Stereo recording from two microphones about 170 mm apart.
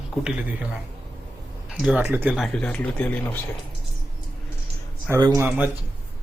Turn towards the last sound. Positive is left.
turn(degrees=-10)  # may be behind; listen again after turning